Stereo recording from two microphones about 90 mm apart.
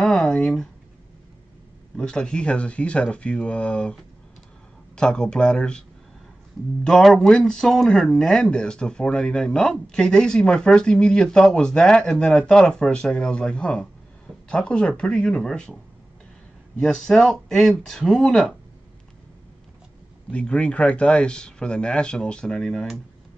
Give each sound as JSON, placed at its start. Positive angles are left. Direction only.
{"t": 0.0, "sound": "a sound", "side_deg": 5}
{"t": 2.0, "sound": "speech", "side_deg": 10}
{"t": 16.8, "sound": "speech", "side_deg": 5}
{"t": 20.2, "sound": "speech", "side_deg": 10}